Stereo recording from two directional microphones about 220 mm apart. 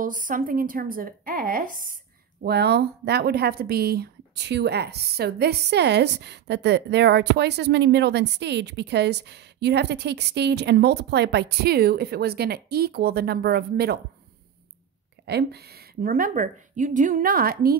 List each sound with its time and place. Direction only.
0.0 s speech: 40° right (ahead or behind)
15.2 s speech: 45° right (ahead or behind)